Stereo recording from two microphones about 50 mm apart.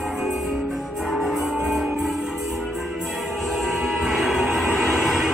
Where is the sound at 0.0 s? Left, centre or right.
Centre.